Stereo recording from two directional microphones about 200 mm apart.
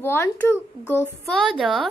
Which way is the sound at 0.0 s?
10° left (ahead or behind).